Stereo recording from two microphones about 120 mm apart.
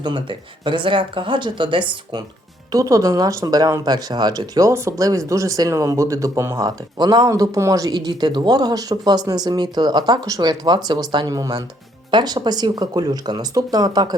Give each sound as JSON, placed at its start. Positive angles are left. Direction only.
{"t": 0.0, "sound": "speech", "side_deg": -40}
{"t": 2.7, "sound": "speech", "side_deg": -30}